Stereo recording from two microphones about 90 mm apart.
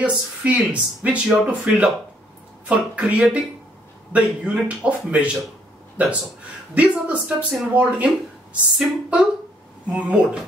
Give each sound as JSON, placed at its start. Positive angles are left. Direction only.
{"t": 0.0, "sound": "speech", "side_deg": -15}